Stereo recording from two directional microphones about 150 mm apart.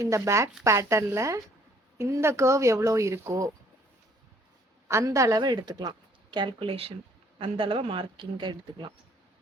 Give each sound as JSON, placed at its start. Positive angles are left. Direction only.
{"t": 0.0, "sound": "a woman's voice", "side_deg": -20}
{"t": 4.9, "sound": "a woman's voice", "side_deg": -20}